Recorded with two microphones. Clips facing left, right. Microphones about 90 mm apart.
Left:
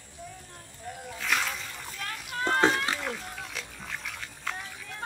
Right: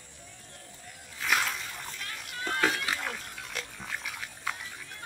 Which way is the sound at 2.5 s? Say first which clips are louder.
Left 5 dB; 30° left (ahead or behind).